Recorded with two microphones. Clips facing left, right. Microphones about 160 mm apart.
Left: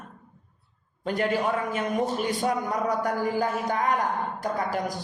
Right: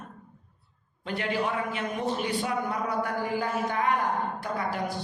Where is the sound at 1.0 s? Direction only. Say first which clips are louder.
Left 4 dB; 45° left (ahead or behind).